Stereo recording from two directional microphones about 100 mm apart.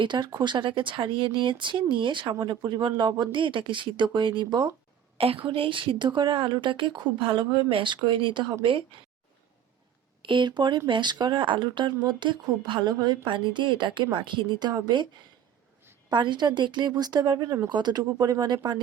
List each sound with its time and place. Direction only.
0.0 s speech: 50° right (ahead or behind)
5.1 s a woman's voice: 75° right (ahead or behind); by 8.5 s 50° right (ahead or behind)
10.2 s speech: 50° right (ahead or behind)
16.0 s speech: 50° right (ahead or behind)